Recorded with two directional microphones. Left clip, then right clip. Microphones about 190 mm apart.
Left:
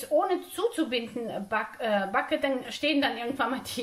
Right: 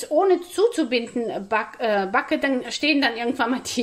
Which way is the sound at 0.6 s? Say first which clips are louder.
Right 8 dB; 45° right (ahead or behind).